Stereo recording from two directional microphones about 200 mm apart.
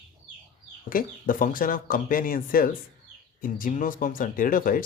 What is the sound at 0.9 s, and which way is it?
Speech, 45° left (ahead or behind).